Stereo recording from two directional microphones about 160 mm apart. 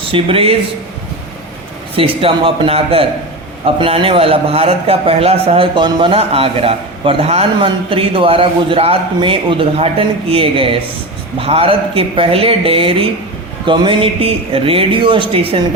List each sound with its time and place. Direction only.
0.0 s speech: 35° right (ahead or behind)
2.0 s a man's voice: 35° right (ahead or behind)